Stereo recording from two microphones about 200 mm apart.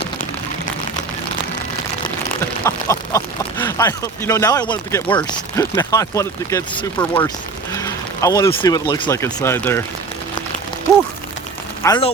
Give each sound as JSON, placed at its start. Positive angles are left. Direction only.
{"t": 2.6, "sound": "speech", "side_deg": 15}
{"t": 7.7, "sound": "boat", "side_deg": 15}
{"t": 8.4, "sound": "speech", "side_deg": 20}
{"t": 11.8, "sound": "speech", "side_deg": 20}